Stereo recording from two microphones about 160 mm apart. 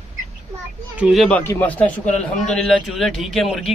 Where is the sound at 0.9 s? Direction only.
5° right (ahead or behind).